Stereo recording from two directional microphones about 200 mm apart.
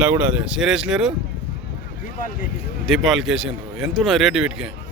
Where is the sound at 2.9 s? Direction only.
Centre (ahead or behind).